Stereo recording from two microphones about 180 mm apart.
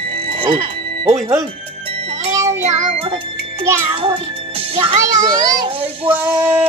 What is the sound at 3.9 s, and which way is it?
A child's voice, 30° right (ahead or behind).